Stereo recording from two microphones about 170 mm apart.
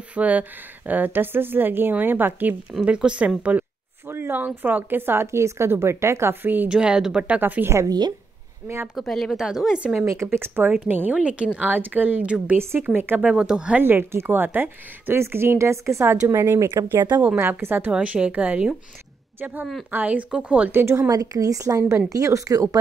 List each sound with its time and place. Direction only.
0.1 s speech: 10° right (ahead or behind)
8.9 s speech: centre (ahead or behind)
10.0 s speech: 15° right (ahead or behind)